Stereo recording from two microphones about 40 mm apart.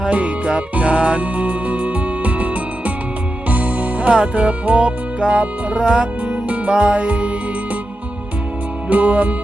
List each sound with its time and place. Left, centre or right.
0.0 s music: right
4.1 s music: right
6.9 s music: right
8.9 s music: right